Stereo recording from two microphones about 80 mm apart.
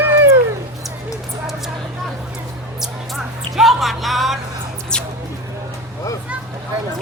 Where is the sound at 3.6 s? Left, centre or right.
Centre.